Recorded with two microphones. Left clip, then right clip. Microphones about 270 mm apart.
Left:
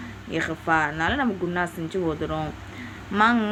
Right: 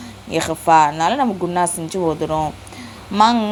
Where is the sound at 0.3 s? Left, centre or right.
Right.